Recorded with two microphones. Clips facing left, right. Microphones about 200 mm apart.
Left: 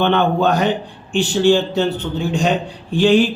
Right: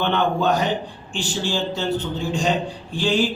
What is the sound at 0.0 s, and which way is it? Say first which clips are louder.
Speech: left 5 dB; 60° left (ahead or behind).